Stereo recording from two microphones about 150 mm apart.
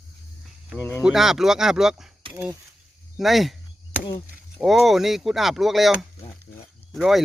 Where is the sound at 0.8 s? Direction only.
15° left (ahead or behind).